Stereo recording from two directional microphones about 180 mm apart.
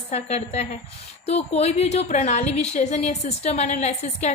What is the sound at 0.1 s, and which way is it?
A woman's voice, 40° left (ahead or behind).